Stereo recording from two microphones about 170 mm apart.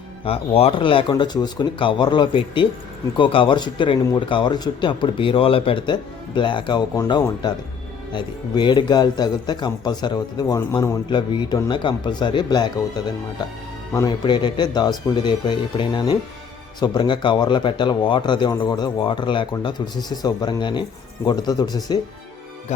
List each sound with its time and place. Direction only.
0.3 s speech: 35° left (ahead or behind)